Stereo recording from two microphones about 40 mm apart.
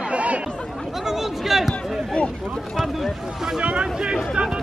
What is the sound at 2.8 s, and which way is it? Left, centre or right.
Speech, centre.